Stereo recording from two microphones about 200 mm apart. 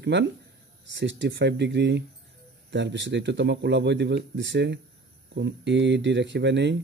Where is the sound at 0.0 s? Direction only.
60° right (ahead or behind).